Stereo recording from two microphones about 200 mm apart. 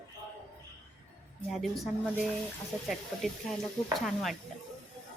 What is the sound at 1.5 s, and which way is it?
A woman's voice, centre (ahead or behind).